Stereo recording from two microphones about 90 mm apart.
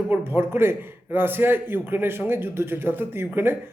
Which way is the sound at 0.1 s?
25° right (ahead or behind).